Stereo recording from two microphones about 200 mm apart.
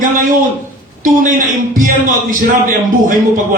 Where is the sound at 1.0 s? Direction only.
40° right (ahead or behind).